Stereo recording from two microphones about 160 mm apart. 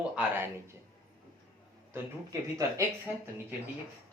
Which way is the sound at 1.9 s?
20° right (ahead or behind).